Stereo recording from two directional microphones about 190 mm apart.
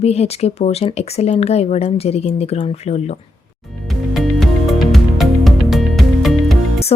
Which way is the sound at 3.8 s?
Centre (ahead or behind).